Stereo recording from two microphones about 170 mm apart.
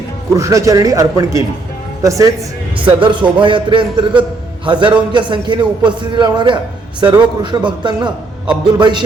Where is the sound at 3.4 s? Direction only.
30° right (ahead or behind).